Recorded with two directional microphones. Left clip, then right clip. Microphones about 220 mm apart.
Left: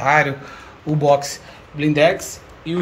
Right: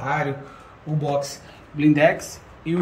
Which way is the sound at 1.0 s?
5° right (ahead or behind).